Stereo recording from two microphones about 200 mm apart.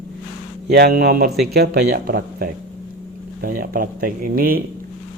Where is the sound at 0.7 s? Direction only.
50° right (ahead or behind).